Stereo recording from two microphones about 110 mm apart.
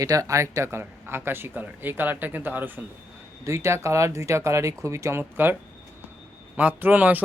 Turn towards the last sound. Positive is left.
turn(degrees=-15)  # may be behind; listen again after turning